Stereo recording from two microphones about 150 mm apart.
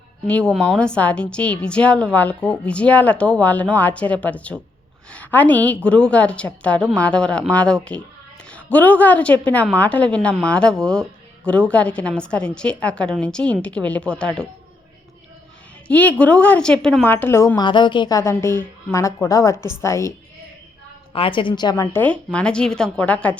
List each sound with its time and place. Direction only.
0.3 s a woman's voice: 10° left (ahead or behind)
15.9 s a woman's voice: 10° left (ahead or behind)
17.6 s a woman's voice: 30° left (ahead or behind)
18.2 s a woman's voice: 20° left (ahead or behind)
21.1 s a woman's voice: 35° left (ahead or behind)
21.9 s a woman's voice: 10° left (ahead or behind)